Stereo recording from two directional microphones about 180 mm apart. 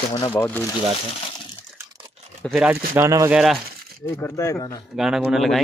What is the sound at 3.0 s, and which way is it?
Speech, 15° right (ahead or behind).